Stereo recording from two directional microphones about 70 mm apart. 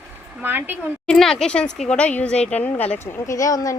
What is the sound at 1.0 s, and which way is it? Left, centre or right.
A woman's voice, centre.